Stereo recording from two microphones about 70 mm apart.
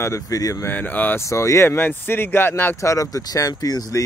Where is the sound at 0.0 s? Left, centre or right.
Left.